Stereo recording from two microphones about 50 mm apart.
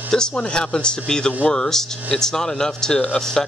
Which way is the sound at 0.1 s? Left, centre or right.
Centre.